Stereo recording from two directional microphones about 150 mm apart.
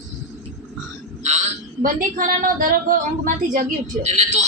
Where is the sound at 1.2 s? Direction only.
50° right (ahead or behind).